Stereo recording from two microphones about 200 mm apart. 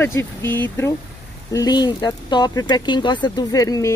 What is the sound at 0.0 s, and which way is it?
Speech, 10° left (ahead or behind).